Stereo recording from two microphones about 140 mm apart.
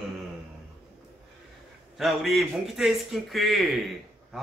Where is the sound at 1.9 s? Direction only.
Centre (ahead or behind).